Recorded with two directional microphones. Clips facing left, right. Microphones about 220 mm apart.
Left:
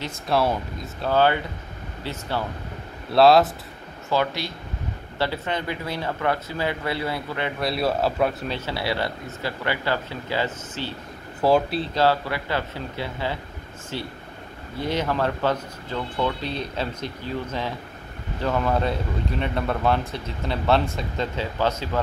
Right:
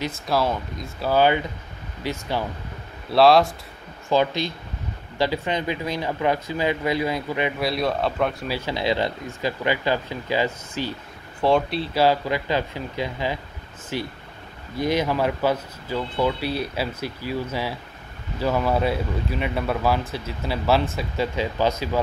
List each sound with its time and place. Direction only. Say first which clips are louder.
0.3 s speech: left 1 dB; centre (ahead or behind)
1.0 s speech: right 1 dB; 10° right (ahead or behind)
3.1 s speech: even; centre (ahead or behind)
4.1 s speech: right 3 dB; 20° right (ahead or behind)
7.6 s speech: left 3 dB; 5° left (ahead or behind)
8.5 s speech: right 3 dB; 10° right (ahead or behind)
11.4 s speech: even; centre (ahead or behind)
11.9 s speech: right 2 dB; 15° right (ahead or behind)